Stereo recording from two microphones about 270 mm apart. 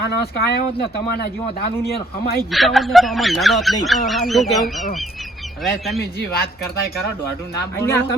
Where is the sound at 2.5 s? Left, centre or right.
Centre.